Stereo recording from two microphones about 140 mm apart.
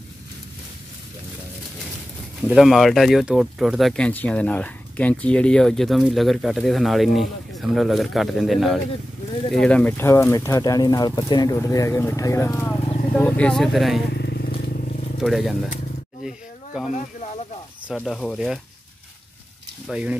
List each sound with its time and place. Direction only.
2.5 s speech: centre (ahead or behind); by 13.2 s 20° left (ahead or behind)
13.2 s speech: 5° left (ahead or behind)
15.2 s speech: centre (ahead or behind)
16.3 s a sound: centre (ahead or behind)
16.9 s snake: 50° left (ahead or behind)
18.0 s speech: 5° left (ahead or behind)
19.9 s speech: 10° right (ahead or behind)